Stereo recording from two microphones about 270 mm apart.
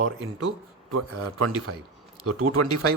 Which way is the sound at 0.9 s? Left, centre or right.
Right.